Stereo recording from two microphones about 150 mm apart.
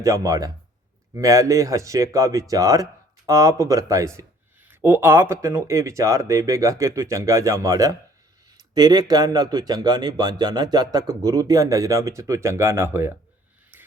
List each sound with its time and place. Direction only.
0.0 s a man's voice: 20° right (ahead or behind)